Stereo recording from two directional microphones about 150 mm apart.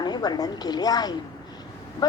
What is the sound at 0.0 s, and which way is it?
A woman's voice, 25° left (ahead or behind).